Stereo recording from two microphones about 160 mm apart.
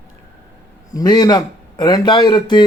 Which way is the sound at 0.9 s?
25° left (ahead or behind).